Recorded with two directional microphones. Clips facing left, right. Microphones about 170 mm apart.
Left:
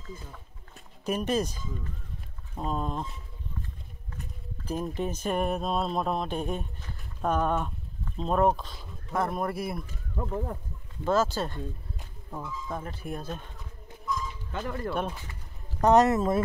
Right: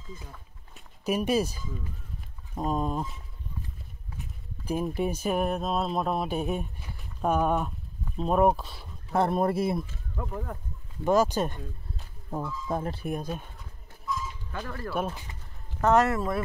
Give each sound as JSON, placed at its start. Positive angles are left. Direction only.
{"t": 0.7, "sound": "speech", "side_deg": -10}
{"t": 4.2, "sound": "speech", "side_deg": -10}
{"t": 9.1, "sound": "speech", "side_deg": -30}
{"t": 10.1, "sound": "speech", "side_deg": 25}
{"t": 11.1, "sound": "speech", "side_deg": -15}
{"t": 12.3, "sound": "speech", "side_deg": -30}
{"t": 13.0, "sound": "speech", "side_deg": -15}
{"t": 14.0, "sound": "a sound", "side_deg": 0}
{"t": 14.5, "sound": "speech", "side_deg": 20}